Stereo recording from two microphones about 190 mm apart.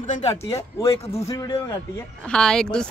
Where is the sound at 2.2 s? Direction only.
5° left (ahead or behind).